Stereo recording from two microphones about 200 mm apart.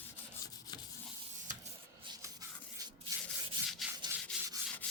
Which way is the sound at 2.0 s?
20° right (ahead or behind).